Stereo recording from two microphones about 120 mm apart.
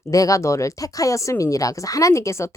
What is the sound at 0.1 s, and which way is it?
Speech, 25° left (ahead or behind).